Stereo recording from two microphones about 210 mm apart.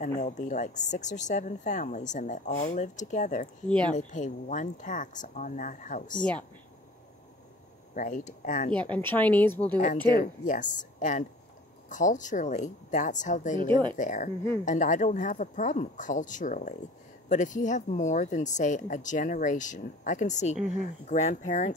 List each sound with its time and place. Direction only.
0.2 s speech: 35° left (ahead or behind)
3.6 s speech: 5° left (ahead or behind)
3.9 s speech: 35° left (ahead or behind)
7.9 s speech: 35° left (ahead or behind)
8.9 s speech: 10° left (ahead or behind)
10.1 s speech: 40° left (ahead or behind)